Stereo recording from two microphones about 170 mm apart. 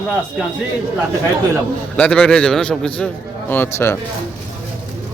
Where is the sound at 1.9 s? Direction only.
5° left (ahead or behind).